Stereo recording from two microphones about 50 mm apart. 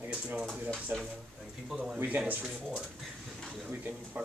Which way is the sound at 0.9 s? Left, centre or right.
Right.